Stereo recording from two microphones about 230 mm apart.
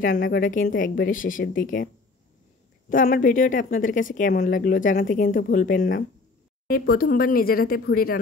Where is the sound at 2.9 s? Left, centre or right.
Left.